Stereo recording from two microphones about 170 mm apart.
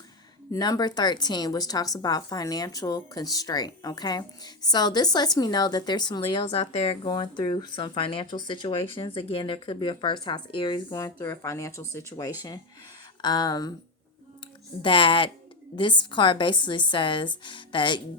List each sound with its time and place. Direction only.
0.5 s a woman's voice: 20° left (ahead or behind)
13.2 s a woman's voice: 25° left (ahead or behind)
14.8 s a woman's voice: 30° left (ahead or behind)